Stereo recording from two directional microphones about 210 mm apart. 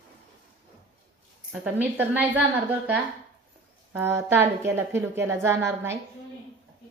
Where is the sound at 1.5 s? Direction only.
10° right (ahead or behind).